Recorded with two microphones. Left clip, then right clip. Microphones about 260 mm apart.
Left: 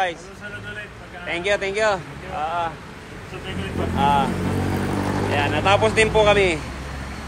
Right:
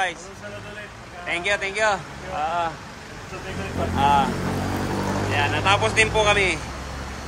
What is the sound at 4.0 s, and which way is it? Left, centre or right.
Speech, centre.